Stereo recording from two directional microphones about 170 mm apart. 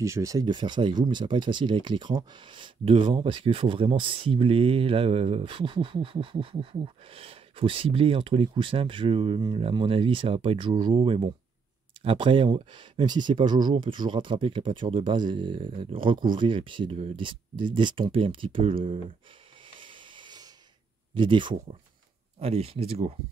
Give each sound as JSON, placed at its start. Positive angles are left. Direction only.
{"t": 0.0, "sound": "speech", "side_deg": -20}
{"t": 19.8, "sound": "a sound", "side_deg": -30}
{"t": 21.1, "sound": "speech", "side_deg": -30}